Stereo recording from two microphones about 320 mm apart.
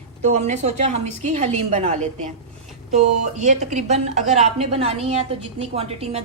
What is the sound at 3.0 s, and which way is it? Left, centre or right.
A woman's voice, right.